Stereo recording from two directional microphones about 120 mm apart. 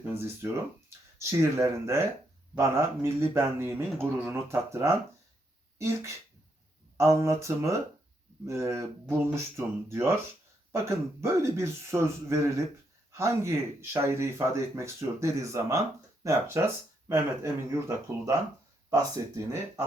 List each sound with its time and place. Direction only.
0.0 s a sound: 20° right (ahead or behind)
1.2 s speech: 25° right (ahead or behind)
11.2 s speech: 25° right (ahead or behind)